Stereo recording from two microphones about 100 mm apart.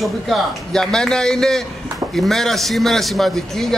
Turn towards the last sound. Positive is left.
turn(degrees=5)  # may be behind; listen again after turning